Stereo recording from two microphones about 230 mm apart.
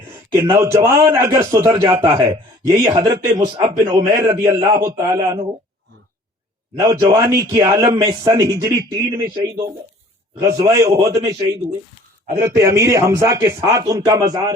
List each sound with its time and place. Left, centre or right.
0.4 s a man's voice: centre
6.7 s a man's voice: centre